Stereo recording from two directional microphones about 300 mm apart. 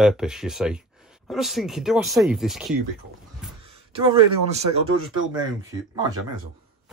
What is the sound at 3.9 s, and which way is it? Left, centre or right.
Speech, centre.